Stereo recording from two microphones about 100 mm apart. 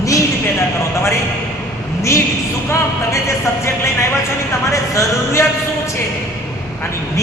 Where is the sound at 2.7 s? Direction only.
30° left (ahead or behind).